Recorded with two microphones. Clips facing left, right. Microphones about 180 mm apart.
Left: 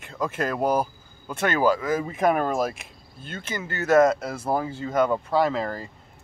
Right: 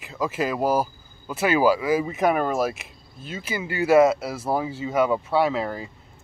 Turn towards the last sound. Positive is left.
turn(degrees=-5)  # may be behind; listen again after turning